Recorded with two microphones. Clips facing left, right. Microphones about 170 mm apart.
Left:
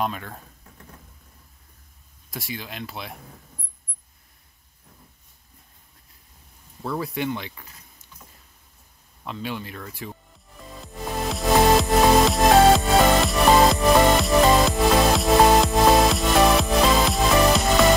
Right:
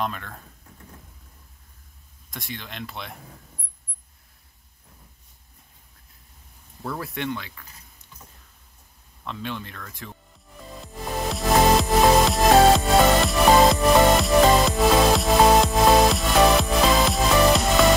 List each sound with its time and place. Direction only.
0.0 s speech: 10° left (ahead or behind)
2.3 s speech: 5° left (ahead or behind)
6.8 s speech: centre (ahead or behind)
7.3 s speech: 20° left (ahead or behind)
9.2 s speech: 10° left (ahead or behind)
10.8 s music: centre (ahead or behind)